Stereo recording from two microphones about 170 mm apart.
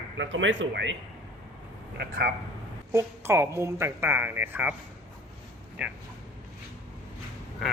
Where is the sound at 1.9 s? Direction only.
65° right (ahead or behind).